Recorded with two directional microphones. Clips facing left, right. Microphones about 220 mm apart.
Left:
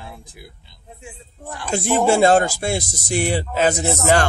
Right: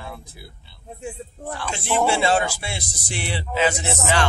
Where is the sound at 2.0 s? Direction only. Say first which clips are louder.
Left 6 dB; 45° left (ahead or behind).